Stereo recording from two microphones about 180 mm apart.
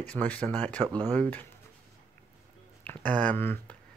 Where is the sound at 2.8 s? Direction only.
10° left (ahead or behind).